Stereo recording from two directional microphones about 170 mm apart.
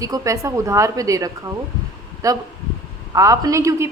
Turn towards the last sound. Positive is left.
turn(degrees=-15)  # may be behind; listen again after turning